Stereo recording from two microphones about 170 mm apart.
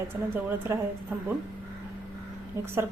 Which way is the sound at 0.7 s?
15° right (ahead or behind).